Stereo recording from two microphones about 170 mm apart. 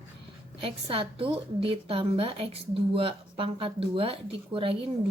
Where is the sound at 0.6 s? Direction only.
30° right (ahead or behind).